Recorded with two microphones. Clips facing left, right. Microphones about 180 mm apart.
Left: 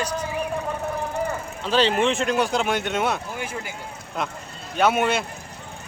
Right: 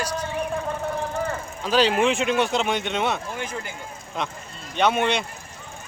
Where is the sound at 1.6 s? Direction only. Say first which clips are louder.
Right 1 dB; 5° right (ahead or behind).